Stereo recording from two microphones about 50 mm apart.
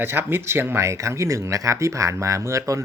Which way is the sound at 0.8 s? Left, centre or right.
Right.